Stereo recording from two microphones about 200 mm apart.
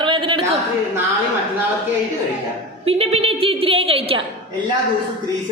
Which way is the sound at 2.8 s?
30° right (ahead or behind).